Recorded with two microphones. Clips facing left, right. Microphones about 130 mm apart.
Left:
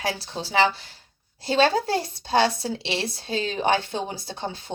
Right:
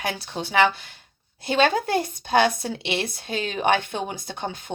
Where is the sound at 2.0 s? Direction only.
30° left (ahead or behind).